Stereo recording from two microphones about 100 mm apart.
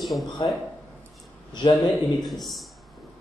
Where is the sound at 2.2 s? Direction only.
Centre (ahead or behind).